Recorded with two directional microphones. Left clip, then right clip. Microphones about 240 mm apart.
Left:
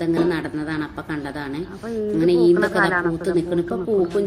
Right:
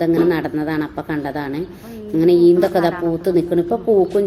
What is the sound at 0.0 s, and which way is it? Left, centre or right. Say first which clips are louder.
A woman's voice: right 5 dB; centre.